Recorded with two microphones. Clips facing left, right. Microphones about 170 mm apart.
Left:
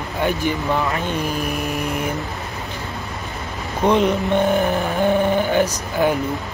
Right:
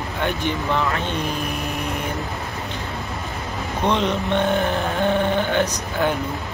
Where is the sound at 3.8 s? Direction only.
5° left (ahead or behind).